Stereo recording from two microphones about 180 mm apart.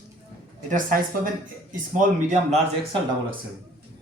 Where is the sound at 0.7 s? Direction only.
45° right (ahead or behind).